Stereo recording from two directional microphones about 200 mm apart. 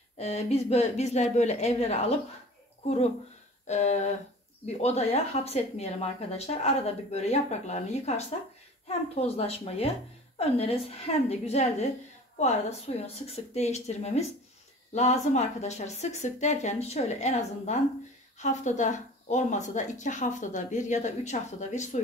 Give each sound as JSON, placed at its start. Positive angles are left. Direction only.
{"t": 0.2, "sound": "speech", "side_deg": 35}